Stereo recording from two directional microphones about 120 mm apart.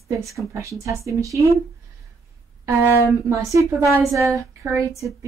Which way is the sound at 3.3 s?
25° right (ahead or behind).